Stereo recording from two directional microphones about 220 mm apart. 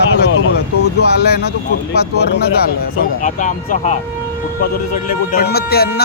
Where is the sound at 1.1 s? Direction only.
45° left (ahead or behind).